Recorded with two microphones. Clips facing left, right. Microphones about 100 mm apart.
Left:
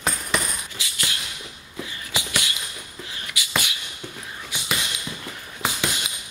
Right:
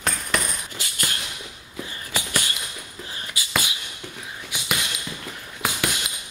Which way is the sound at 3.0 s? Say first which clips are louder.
Right 2 dB; 30° right (ahead or behind).